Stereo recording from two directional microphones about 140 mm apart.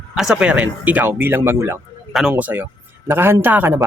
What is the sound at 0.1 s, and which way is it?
Speech, 5° right (ahead or behind).